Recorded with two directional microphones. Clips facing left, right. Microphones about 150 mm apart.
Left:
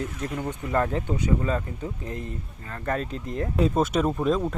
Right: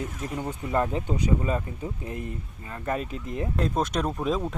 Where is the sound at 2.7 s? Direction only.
10° right (ahead or behind).